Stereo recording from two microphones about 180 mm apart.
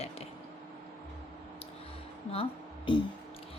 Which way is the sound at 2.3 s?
30° left (ahead or behind).